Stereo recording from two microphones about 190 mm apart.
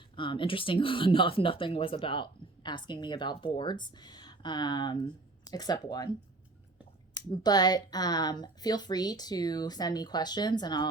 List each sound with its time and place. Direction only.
0.2 s speech: 25° left (ahead or behind)
7.3 s speech: 20° left (ahead or behind)